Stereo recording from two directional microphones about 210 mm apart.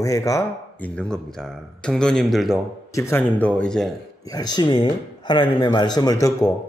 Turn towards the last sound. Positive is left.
turn(degrees=15)  # may be behind; listen again after turning